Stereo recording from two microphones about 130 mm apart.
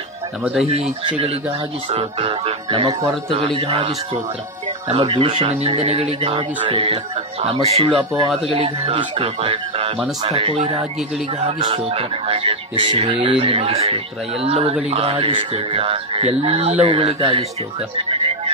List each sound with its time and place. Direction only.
0.4 s speech: 5° right (ahead or behind)
1.0 s speech: 45° right (ahead or behind)
4.9 s speech: 40° right (ahead or behind)
5.5 s speech: 55° right (ahead or behind)
18.1 s music: 45° right (ahead or behind)